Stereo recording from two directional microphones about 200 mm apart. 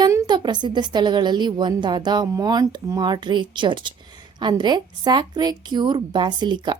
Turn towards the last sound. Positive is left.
turn(degrees=-20)  # may be behind; listen again after turning